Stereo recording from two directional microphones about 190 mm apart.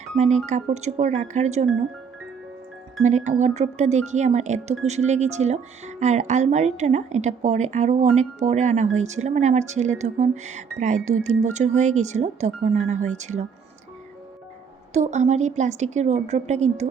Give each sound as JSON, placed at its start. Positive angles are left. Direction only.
{"t": 0.4, "sound": "speech", "side_deg": -35}
{"t": 3.0, "sound": "speech", "side_deg": -40}
{"t": 14.9, "sound": "speech", "side_deg": -35}